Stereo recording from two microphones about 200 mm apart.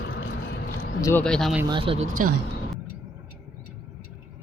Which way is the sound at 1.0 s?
10° left (ahead or behind).